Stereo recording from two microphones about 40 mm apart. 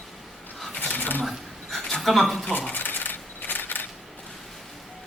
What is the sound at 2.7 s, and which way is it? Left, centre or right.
Coin, left.